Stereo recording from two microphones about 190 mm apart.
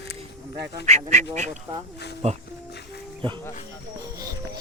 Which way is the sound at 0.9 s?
40° right (ahead or behind).